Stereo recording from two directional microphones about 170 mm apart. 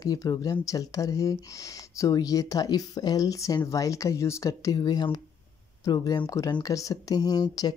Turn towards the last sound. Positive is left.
turn(degrees=20)  # may be behind; listen again after turning